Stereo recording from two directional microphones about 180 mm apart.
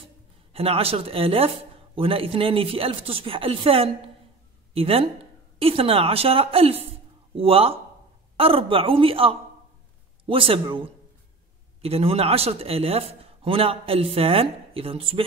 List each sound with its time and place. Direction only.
0.5 s a man's voice: 30° right (ahead or behind)